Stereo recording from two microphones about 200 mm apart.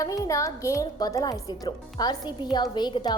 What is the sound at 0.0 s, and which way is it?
A woman's voice, 15° left (ahead or behind).